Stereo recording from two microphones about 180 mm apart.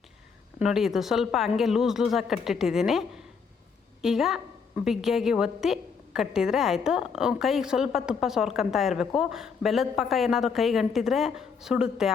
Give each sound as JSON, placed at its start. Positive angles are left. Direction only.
{"t": 0.6, "sound": "a woman's voice", "side_deg": 0}